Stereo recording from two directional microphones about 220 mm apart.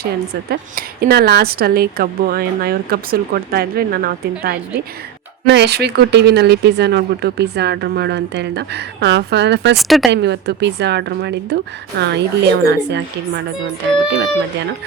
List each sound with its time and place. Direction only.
0.5 s speech: 45° right (ahead or behind)
9.7 s speech: centre (ahead or behind)
10.1 s speech: 50° right (ahead or behind)